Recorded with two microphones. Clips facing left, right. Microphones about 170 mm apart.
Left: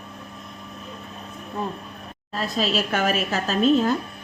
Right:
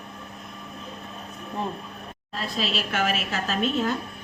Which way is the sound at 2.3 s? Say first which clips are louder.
Left 5 dB; 45° left (ahead or behind).